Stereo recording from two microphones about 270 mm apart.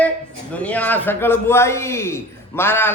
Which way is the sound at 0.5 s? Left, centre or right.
Centre.